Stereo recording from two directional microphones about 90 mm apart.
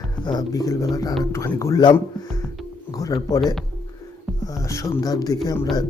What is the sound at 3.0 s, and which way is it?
Speech, 45° left (ahead or behind).